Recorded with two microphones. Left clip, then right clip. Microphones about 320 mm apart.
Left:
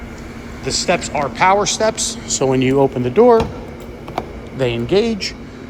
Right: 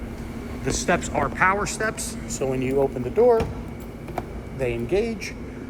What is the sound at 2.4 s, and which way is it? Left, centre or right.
Speech, left.